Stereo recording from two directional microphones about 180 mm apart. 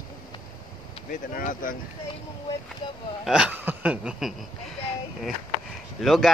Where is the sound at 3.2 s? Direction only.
5° right (ahead or behind).